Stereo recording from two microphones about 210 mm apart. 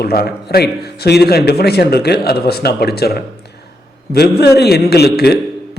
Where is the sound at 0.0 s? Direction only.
45° left (ahead or behind).